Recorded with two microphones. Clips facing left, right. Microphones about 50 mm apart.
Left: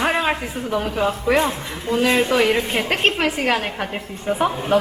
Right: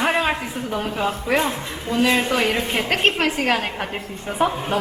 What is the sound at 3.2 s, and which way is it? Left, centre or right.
Speech, left.